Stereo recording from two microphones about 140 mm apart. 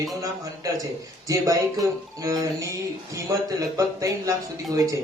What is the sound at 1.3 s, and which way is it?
A man's voice, 25° right (ahead or behind).